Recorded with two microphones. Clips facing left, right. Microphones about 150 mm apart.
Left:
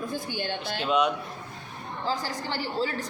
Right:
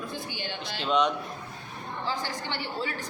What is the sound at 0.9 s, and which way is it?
Speech, 5° left (ahead or behind).